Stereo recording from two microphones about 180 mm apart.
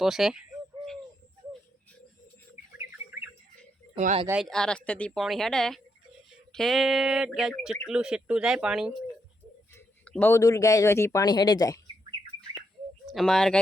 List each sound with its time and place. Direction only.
0.0 s a woman's voice: centre (ahead or behind)
3.9 s speech: 35° right (ahead or behind)
4.4 s a woman's voice: 5° left (ahead or behind); by 11.8 s 20° left (ahead or behind)
13.1 s speech: centre (ahead or behind)